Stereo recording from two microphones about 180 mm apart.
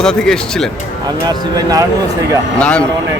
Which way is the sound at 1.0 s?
20° right (ahead or behind).